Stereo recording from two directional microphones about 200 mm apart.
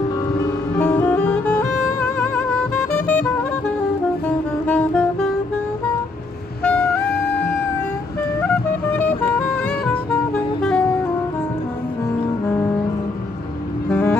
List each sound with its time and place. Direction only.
0.7 s music: 5° left (ahead or behind)
6.6 s music: 5° left (ahead or behind)
7.0 s music: 50° left (ahead or behind)
8.4 s music: 10° left (ahead or behind)
10.3 s music: 5° left (ahead or behind)
13.8 s music: 10° left (ahead or behind)